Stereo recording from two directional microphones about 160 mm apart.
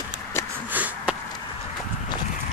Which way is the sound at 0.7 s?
10° right (ahead or behind).